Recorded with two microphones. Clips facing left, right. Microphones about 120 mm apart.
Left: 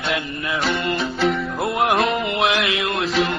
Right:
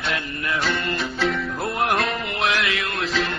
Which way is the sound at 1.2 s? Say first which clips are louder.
Left 4 dB; 25° left (ahead or behind).